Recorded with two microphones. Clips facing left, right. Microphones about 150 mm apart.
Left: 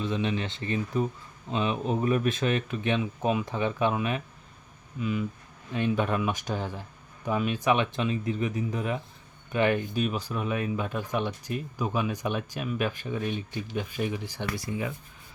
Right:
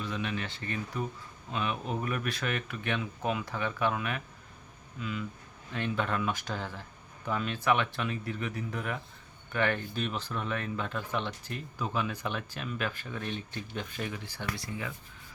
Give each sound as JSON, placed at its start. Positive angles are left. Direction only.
{"t": 0.0, "sound": "speech", "side_deg": 25}